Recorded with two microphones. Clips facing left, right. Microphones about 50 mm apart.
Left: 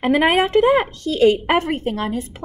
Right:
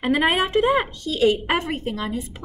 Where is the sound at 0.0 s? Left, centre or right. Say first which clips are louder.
Left 4 dB; left.